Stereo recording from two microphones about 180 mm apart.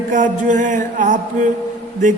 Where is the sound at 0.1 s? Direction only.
45° right (ahead or behind).